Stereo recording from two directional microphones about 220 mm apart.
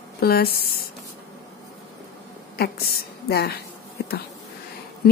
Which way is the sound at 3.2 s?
45° left (ahead or behind).